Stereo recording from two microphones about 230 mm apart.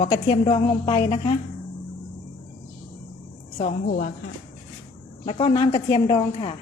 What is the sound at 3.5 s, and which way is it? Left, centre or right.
Speech, left.